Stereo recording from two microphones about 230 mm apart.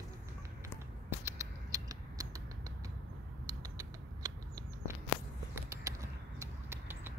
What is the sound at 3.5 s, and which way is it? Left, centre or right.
Rodents, centre.